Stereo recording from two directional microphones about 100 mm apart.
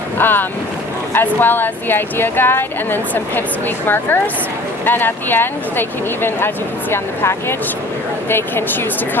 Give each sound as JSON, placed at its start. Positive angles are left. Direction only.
{"t": 0.2, "sound": "speech", "side_deg": 20}
{"t": 6.9, "sound": "speech", "side_deg": 25}